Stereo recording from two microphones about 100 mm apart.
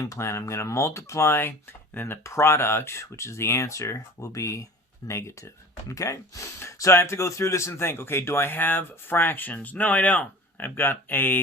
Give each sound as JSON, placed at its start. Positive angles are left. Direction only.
{"t": 0.0, "sound": "speech", "side_deg": 30}